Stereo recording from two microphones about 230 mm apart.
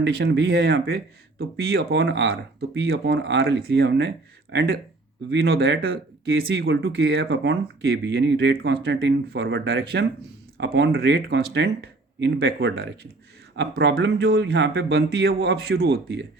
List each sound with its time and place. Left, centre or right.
0.3 s speech: right